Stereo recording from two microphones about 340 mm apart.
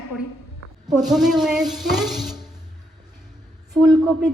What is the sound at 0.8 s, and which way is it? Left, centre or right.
Speech, right.